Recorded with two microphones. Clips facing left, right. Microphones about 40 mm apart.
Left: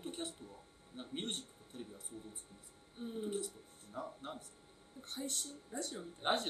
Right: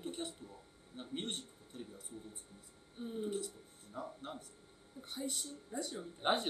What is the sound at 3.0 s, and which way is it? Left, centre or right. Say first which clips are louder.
A man's voice: right 1 dB; centre.